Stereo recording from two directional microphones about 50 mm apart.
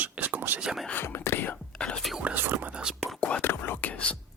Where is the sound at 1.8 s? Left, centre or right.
Centre.